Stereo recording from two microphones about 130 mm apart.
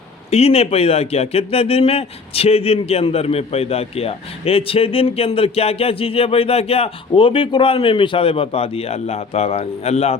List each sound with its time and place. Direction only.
0.3 s speech: 50° left (ahead or behind)